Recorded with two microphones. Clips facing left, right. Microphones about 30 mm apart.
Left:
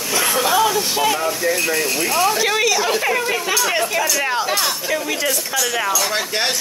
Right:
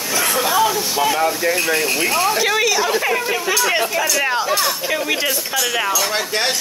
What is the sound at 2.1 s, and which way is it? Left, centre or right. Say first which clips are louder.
Speech: left 1 dB; centre.